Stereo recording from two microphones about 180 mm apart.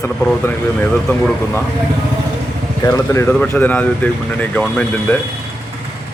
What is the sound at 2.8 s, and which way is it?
Speech, 15° left (ahead or behind).